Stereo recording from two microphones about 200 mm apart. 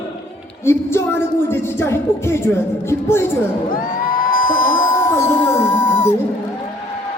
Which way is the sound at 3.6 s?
45° left (ahead or behind).